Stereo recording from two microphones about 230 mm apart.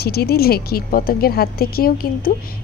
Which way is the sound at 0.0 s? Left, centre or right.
Left.